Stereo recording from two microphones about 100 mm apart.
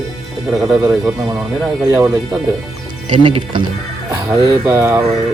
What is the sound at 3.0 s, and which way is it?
Speech, 55° right (ahead or behind).